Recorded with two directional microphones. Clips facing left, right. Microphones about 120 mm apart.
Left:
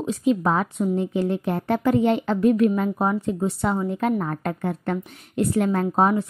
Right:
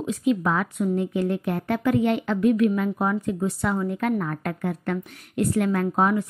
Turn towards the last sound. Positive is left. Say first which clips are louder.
# left 2 dB
turn(degrees=30)  # may be behind; listen again after turning